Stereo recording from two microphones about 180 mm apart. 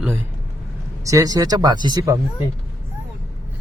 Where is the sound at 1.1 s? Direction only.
20° right (ahead or behind).